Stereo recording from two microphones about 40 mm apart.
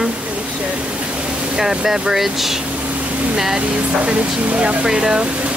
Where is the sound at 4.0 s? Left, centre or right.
Right.